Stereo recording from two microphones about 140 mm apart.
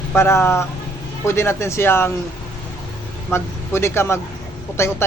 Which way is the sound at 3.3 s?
20° left (ahead or behind).